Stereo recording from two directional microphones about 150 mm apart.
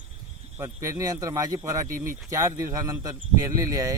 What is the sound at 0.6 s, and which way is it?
Speech, 20° right (ahead or behind).